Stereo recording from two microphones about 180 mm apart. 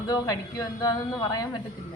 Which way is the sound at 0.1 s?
20° left (ahead or behind).